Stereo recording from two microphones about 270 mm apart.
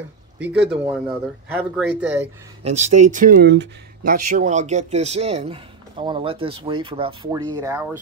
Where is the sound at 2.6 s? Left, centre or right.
Right; by 8.0 s centre.